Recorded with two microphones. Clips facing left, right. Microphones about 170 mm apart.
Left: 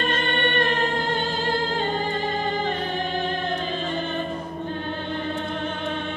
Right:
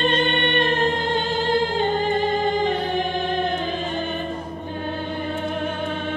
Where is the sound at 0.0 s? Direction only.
25° right (ahead or behind).